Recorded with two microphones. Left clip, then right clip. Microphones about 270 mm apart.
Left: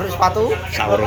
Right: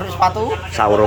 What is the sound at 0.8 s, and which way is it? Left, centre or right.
Speech, right.